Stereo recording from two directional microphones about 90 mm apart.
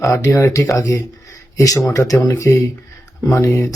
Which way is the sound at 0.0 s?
35° left (ahead or behind).